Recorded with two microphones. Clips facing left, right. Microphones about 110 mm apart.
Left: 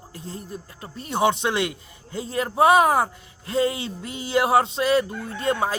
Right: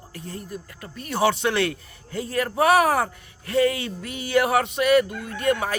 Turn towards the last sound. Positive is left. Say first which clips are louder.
# even
turn(degrees=25)  # may be behind; listen again after turning